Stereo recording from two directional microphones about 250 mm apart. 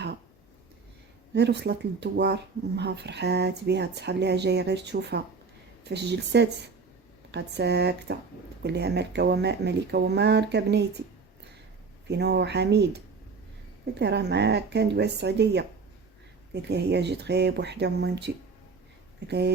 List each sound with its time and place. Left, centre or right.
1.3 s speech: right
12.0 s speech: right
19.3 s speech: right